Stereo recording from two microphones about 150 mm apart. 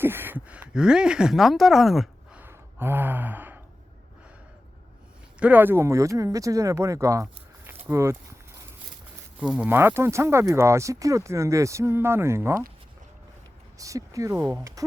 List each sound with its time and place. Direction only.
0.0 s speech: 15° right (ahead or behind)
2.4 s sigh: 15° right (ahead or behind)
5.4 s speech: 10° right (ahead or behind)
9.4 s speech: 5° right (ahead or behind)
13.7 s speech: 20° right (ahead or behind)